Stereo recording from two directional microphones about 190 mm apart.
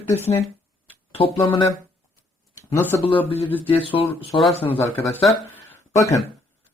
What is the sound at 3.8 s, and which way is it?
Speech, 30° left (ahead or behind).